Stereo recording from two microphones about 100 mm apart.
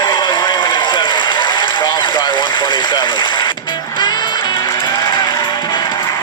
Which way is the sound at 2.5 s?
50° left (ahead or behind).